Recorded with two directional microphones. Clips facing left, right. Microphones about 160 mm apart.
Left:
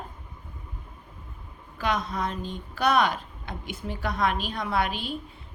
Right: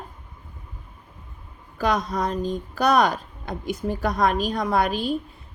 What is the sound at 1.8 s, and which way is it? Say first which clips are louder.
Speech: right 5 dB; 40° right (ahead or behind).